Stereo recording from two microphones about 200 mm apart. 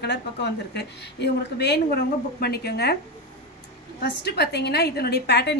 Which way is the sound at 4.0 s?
55° left (ahead or behind).